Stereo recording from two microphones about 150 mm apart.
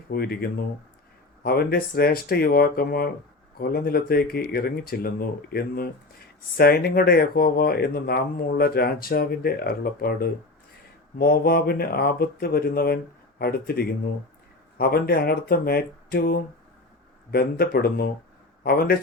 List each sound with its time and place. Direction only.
0.1 s speech: 90° left
17.3 s speech: 90° left